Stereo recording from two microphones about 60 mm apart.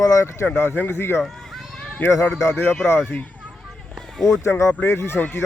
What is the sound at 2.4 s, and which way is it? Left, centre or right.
Speech, left.